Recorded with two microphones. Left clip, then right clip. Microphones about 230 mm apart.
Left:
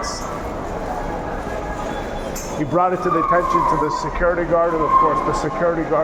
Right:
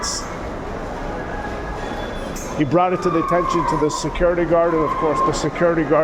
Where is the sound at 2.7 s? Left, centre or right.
Right.